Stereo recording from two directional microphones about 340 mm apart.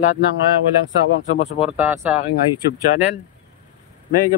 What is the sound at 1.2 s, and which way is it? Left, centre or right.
Speech, left.